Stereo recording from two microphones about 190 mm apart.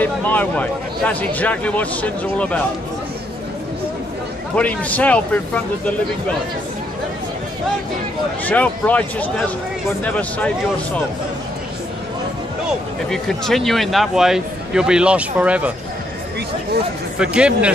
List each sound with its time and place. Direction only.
0.0 s speech: 10° left (ahead or behind)
4.6 s speech: 5° left (ahead or behind)
8.5 s speech: 10° left (ahead or behind)
13.1 s speech: centre (ahead or behind)
17.2 s speech: 5° right (ahead or behind)